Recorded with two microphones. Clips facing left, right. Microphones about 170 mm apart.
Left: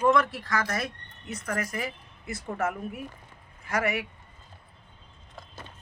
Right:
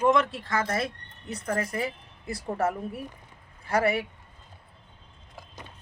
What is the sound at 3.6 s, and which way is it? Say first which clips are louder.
Speech: right 4 dB; 30° right (ahead or behind).